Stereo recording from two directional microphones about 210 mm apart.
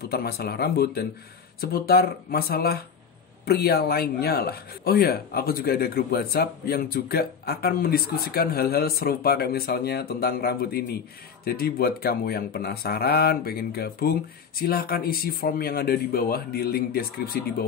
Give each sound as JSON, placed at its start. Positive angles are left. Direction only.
{"t": 0.1, "sound": "speech", "side_deg": 50}